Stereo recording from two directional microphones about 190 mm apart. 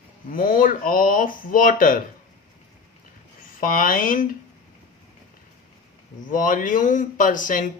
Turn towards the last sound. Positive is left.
turn(degrees=45)  # may be behind; listen again after turning